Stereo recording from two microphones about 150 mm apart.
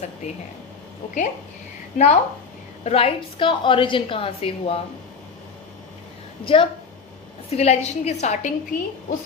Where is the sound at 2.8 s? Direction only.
40° left (ahead or behind).